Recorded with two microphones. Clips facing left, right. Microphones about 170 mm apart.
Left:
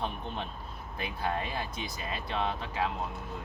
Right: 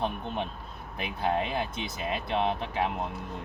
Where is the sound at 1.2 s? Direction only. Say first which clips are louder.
Right 6 dB; 20° right (ahead or behind).